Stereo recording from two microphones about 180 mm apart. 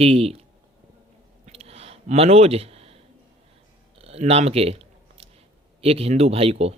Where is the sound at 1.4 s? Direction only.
35° right (ahead or behind).